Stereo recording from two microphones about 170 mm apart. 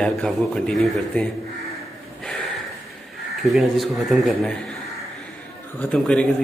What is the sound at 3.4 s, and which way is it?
A man's voice, centre (ahead or behind).